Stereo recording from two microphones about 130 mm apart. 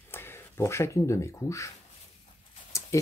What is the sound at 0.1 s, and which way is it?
Speech, 20° left (ahead or behind).